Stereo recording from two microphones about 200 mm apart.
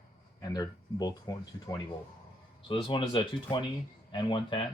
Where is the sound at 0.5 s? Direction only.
20° left (ahead or behind).